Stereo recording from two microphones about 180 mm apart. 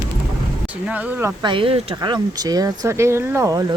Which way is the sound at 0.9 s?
10° right (ahead or behind).